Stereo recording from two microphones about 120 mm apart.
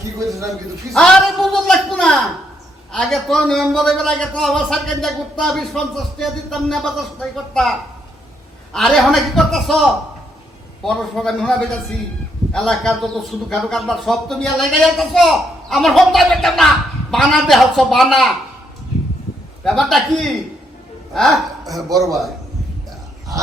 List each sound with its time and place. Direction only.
0.2 s a man's voice: 25° right (ahead or behind)
0.9 s a man's voice: centre (ahead or behind)
8.7 s a man's voice: centre (ahead or behind)
10.8 s a man's voice: 5° left (ahead or behind)
19.6 s a man's voice: 5° left (ahead or behind)
21.8 s a man's voice: 30° right (ahead or behind)